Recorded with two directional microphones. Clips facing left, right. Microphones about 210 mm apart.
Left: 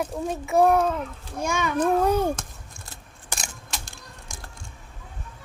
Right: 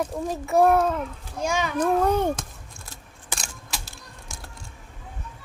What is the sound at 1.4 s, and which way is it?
Speech, 55° left (ahead or behind).